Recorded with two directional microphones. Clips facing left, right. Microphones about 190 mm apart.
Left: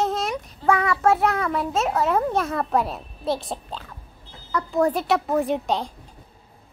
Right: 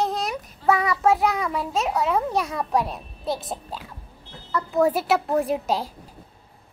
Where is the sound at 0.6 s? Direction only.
20° right (ahead or behind).